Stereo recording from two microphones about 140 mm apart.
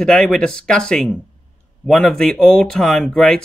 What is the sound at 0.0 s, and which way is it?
Speech, 5° left (ahead or behind).